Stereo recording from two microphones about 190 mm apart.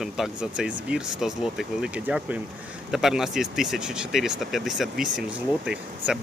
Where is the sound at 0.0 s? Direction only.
Centre (ahead or behind).